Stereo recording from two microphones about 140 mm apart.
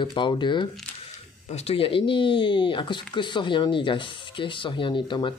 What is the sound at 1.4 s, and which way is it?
Speech, 45° left (ahead or behind).